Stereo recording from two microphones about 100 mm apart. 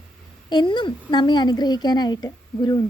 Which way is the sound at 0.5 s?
50° left (ahead or behind).